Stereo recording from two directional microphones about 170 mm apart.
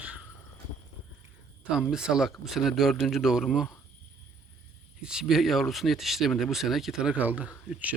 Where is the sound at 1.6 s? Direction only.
5° right (ahead or behind).